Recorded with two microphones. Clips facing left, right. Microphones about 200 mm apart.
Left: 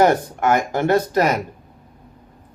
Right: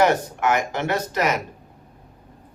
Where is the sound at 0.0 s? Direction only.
35° left (ahead or behind).